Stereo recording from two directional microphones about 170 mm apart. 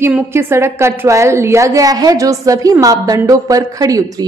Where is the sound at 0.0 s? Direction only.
15° right (ahead or behind).